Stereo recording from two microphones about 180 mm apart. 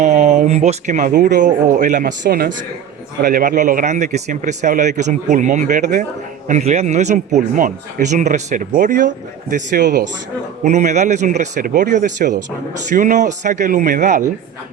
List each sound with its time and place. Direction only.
0.0 s a man's voice: 40° right (ahead or behind)
2.2 s speech: 60° right (ahead or behind)
3.2 s a man's voice: 45° right (ahead or behind)